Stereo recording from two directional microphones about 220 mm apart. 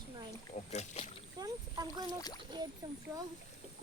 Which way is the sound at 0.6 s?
30° left (ahead or behind).